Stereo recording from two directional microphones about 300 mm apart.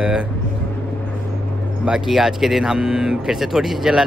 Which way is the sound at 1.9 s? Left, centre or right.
Centre.